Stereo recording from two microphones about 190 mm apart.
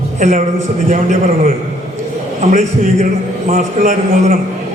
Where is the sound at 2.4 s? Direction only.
40° right (ahead or behind).